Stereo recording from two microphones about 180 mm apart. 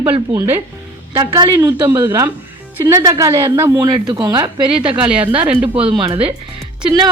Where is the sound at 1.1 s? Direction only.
25° right (ahead or behind).